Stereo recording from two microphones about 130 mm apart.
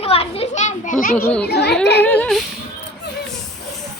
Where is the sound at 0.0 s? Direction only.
50° left (ahead or behind); by 1.1 s 80° left.